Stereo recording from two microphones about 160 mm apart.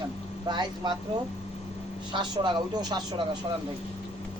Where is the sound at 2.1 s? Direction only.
30° right (ahead or behind).